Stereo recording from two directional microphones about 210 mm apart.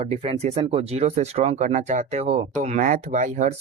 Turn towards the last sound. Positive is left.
turn(degrees=-35)  # may be behind; listen again after turning